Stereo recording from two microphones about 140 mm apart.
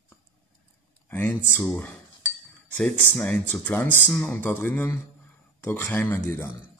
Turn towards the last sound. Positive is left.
turn(degrees=15)  # may be behind; listen again after turning